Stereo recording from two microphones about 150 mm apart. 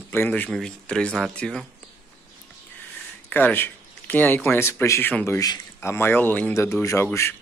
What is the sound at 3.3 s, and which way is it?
Speech, 15° left (ahead or behind).